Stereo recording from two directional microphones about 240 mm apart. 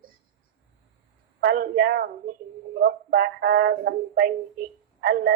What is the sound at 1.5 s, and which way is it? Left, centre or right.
Speech, right.